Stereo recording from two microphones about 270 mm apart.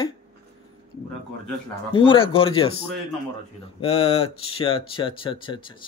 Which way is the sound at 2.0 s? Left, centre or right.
Centre.